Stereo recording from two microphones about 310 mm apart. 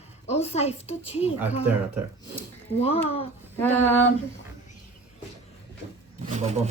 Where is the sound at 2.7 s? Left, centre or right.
Centre.